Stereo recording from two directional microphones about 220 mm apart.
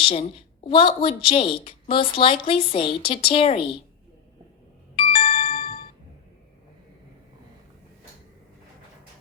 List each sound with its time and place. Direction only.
0.0 s a woman's voice: 25° left (ahead or behind)
4.9 s music: 25° left (ahead or behind)